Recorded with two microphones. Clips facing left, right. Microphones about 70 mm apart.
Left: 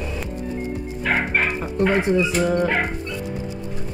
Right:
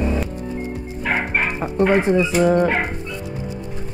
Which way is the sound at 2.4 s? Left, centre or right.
Centre.